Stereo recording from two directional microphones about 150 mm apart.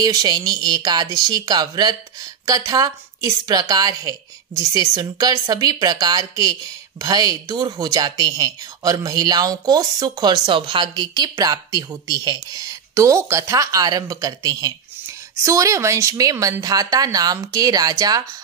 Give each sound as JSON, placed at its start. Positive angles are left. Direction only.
{"t": 0.0, "sound": "a woman's voice", "side_deg": -25}